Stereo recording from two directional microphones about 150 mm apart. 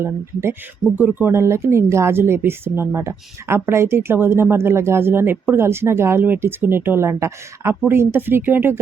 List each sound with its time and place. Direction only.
0.9 s speech: 15° right (ahead or behind)